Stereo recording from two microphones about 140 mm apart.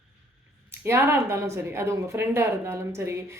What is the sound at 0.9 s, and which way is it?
Speech, 15° right (ahead or behind).